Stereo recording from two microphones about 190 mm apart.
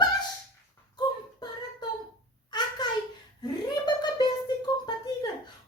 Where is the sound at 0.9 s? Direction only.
20° left (ahead or behind).